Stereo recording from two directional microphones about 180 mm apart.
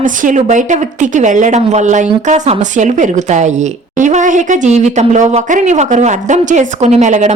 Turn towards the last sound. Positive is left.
turn(degrees=-40)  # may be behind; listen again after turning